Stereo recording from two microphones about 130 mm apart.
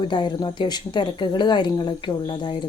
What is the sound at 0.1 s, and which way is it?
Speech, 35° left (ahead or behind).